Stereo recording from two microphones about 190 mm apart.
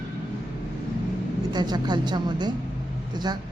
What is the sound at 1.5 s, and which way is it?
A woman's voice, 20° right (ahead or behind).